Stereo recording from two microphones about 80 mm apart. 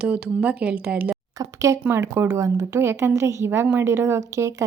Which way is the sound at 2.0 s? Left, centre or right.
Right.